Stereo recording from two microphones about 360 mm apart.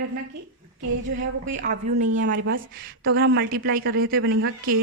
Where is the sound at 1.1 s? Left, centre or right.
Right.